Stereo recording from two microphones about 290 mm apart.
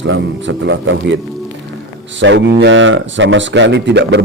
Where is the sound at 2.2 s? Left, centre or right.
Right.